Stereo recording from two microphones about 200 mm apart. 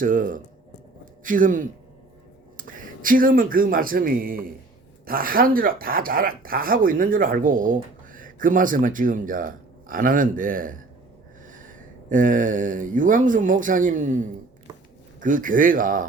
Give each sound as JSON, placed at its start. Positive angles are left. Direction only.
{"t": 0.0, "sound": "speech", "side_deg": -45}
{"t": 12.0, "sound": "speech", "side_deg": -40}